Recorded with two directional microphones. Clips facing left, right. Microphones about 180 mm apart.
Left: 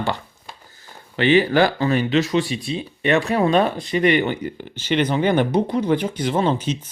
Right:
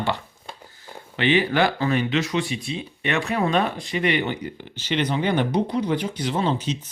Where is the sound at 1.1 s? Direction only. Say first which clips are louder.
Left 4 dB; 40° left (ahead or behind).